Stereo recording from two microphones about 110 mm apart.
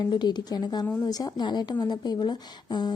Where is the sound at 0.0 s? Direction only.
40° left (ahead or behind).